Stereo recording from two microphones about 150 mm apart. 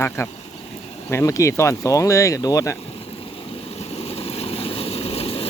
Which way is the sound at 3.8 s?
45° left (ahead or behind).